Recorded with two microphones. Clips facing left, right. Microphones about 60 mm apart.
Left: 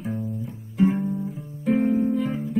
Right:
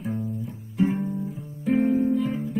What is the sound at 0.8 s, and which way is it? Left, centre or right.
Guitar, left.